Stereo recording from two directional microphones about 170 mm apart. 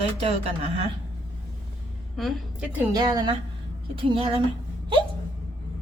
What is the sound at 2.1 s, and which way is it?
Speech, centre (ahead or behind).